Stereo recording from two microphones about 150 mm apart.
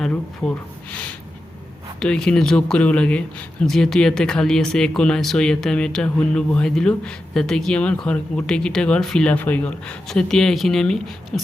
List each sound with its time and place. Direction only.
0.0 s speech: 5° left (ahead or behind)